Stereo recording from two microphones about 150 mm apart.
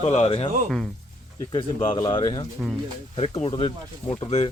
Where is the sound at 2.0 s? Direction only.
30° left (ahead or behind).